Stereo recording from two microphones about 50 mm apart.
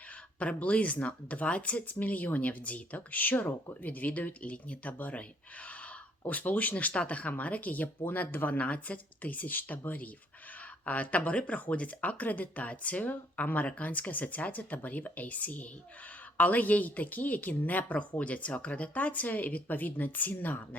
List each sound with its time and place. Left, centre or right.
0.3 s speech: left
6.2 s speech: left